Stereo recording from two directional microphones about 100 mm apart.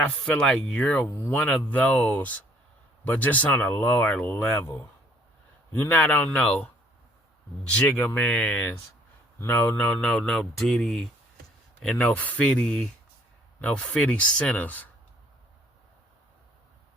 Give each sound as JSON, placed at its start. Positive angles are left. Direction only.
{"t": 0.0, "sound": "speech", "side_deg": 10}
{"t": 4.1, "sound": "speech", "side_deg": 10}
{"t": 5.7, "sound": "speech", "side_deg": 20}
{"t": 7.8, "sound": "speech", "side_deg": 20}
{"t": 9.4, "sound": "speech", "side_deg": 20}